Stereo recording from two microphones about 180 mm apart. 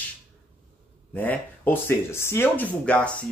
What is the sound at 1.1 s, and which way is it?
Speech, 10° left (ahead or behind).